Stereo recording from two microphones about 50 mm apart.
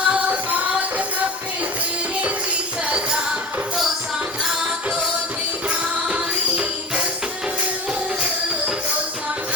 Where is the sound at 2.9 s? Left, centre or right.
Centre.